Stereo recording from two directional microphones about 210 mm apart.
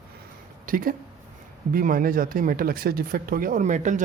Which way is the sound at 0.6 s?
40° right (ahead or behind).